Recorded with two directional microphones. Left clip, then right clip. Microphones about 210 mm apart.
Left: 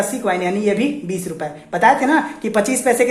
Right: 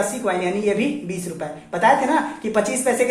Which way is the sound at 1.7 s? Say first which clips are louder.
Left 3 dB; 40° left (ahead or behind).